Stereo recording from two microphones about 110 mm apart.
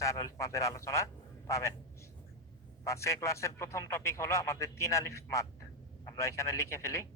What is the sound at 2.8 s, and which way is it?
A man's voice, 30° left (ahead or behind).